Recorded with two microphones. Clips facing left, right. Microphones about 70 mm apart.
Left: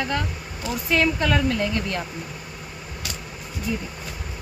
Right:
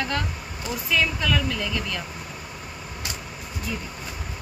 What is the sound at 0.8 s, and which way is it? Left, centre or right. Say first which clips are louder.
Speech: left 3 dB; left.